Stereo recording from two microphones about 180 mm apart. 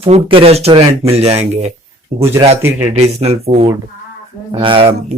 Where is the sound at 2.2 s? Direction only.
15° right (ahead or behind).